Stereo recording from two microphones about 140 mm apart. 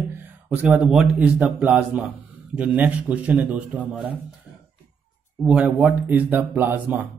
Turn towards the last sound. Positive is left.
turn(degrees=-15)  # may be behind; listen again after turning